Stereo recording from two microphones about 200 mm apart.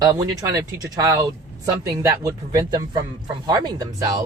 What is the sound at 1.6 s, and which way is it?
Speech, 15° right (ahead or behind).